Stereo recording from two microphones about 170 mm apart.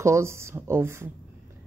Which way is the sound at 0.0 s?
15° right (ahead or behind).